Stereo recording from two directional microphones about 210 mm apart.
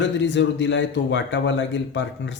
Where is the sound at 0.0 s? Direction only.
60° left (ahead or behind).